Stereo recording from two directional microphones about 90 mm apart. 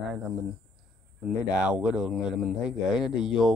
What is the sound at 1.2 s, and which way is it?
Speech, 10° right (ahead or behind).